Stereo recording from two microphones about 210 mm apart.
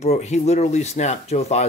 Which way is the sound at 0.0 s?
30° left (ahead or behind).